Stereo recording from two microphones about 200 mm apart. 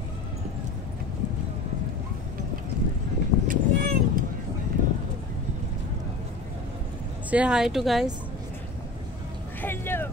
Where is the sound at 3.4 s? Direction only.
50° right (ahead or behind).